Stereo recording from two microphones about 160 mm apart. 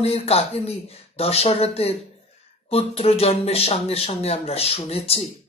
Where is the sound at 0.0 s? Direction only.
40° left (ahead or behind).